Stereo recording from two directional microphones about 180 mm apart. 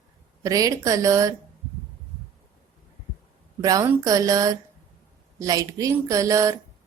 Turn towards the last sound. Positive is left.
turn(degrees=-20)  # may be behind; listen again after turning